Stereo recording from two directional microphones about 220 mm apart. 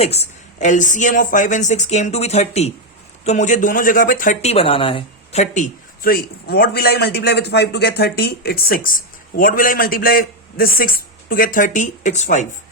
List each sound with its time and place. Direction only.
0.0 s speech: 30° left (ahead or behind)